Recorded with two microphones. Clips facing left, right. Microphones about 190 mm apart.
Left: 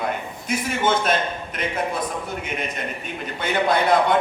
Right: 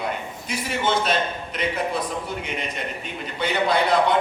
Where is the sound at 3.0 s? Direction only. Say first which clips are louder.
Right 2 dB; 50° left (ahead or behind).